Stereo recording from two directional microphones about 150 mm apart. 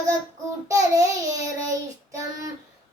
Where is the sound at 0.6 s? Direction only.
20° right (ahead or behind).